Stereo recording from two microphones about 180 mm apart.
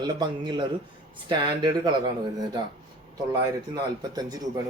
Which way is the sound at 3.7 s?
20° right (ahead or behind).